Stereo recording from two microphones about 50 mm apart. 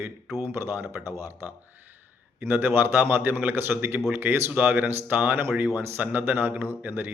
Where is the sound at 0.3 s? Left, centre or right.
Right.